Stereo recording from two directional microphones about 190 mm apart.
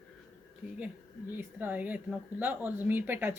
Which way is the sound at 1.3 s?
10° right (ahead or behind).